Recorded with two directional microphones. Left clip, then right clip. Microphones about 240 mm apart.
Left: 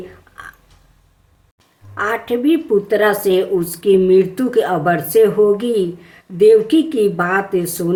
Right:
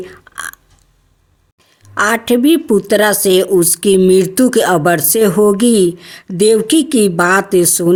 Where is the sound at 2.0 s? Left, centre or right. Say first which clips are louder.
Right 6 dB; right.